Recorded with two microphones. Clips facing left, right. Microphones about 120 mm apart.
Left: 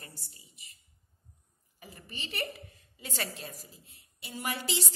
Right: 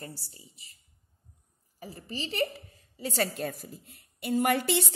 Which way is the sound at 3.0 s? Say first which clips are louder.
Right 9 dB; 40° right (ahead or behind).